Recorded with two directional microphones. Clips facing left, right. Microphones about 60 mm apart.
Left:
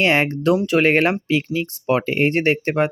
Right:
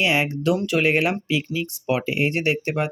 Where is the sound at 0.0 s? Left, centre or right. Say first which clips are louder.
Left 4 dB; left.